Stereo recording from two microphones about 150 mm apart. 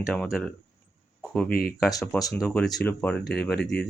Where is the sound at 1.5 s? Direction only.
85° left.